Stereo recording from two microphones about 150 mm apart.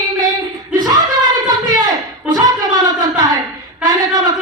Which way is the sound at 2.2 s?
25° right (ahead or behind).